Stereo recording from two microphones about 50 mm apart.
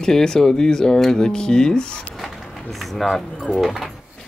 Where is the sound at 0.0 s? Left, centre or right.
Centre.